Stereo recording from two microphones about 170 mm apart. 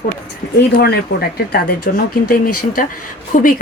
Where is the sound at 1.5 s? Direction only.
60° left (ahead or behind).